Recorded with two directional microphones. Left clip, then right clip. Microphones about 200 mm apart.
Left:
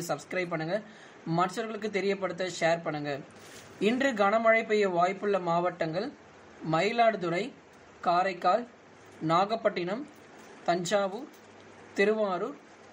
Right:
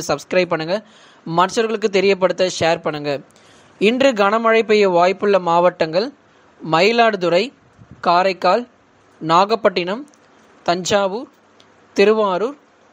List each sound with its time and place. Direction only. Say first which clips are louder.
0.0 s speech: right 14 dB; 40° right (ahead or behind)